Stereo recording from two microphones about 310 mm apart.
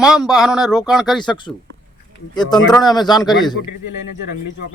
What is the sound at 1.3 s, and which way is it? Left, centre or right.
Speech, centre.